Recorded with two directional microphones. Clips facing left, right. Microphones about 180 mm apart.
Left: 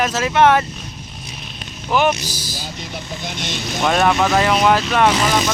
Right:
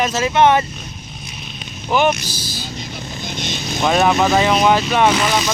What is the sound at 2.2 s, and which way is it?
Speech, 40° left (ahead or behind).